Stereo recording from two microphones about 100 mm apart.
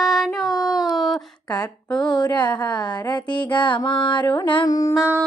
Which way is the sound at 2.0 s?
50° left (ahead or behind).